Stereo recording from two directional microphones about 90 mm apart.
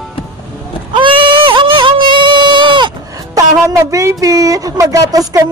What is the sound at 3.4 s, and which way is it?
Speech, 35° right (ahead or behind).